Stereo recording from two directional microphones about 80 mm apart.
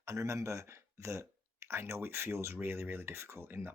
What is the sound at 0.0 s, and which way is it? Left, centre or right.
Speech, right.